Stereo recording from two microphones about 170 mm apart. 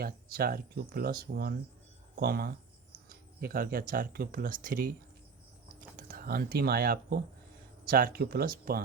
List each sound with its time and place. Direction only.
0.0 s speech: 60° right (ahead or behind)
6.0 s speech: 60° right (ahead or behind)